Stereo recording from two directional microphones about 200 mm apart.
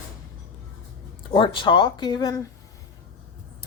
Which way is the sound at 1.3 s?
25° left (ahead or behind).